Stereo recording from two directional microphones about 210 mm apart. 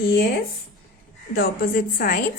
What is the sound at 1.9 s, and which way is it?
Speech, 40° left (ahead or behind).